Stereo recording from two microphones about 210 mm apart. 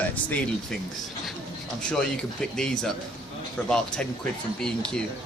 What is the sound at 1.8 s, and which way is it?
Speech, 5° left (ahead or behind).